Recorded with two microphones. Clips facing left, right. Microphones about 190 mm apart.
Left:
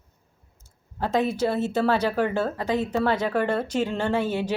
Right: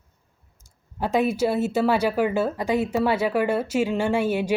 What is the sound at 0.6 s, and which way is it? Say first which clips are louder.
A woman's voice: right 1 dB; 10° right (ahead or behind).